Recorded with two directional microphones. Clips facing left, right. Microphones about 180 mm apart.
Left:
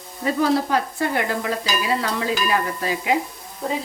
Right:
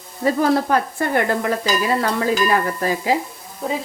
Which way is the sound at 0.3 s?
50° right (ahead or behind).